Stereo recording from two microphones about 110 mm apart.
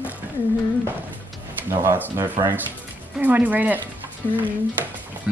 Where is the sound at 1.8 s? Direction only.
20° right (ahead or behind).